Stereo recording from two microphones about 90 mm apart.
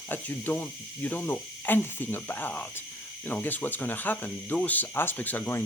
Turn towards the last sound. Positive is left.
turn(degrees=20)  # may be behind; listen again after turning